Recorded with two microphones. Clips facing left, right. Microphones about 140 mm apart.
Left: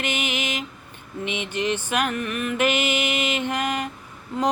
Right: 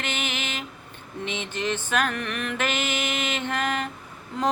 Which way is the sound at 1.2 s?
15° left (ahead or behind).